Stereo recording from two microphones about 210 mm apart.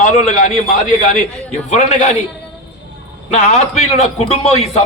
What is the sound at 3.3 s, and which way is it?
A man's voice, 35° left (ahead or behind).